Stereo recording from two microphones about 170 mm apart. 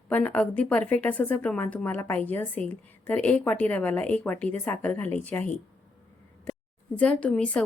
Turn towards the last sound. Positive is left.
turn(degrees=5)  # may be behind; listen again after turning